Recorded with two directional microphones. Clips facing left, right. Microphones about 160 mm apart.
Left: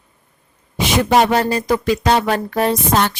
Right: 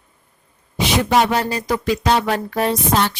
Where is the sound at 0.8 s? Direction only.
50° left (ahead or behind).